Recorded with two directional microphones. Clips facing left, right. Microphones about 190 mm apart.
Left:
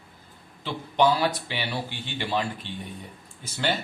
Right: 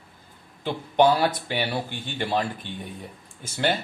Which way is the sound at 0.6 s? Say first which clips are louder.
Right 3 dB; 50° right (ahead or behind).